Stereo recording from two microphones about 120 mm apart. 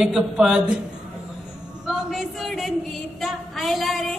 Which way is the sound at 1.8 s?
Centre (ahead or behind).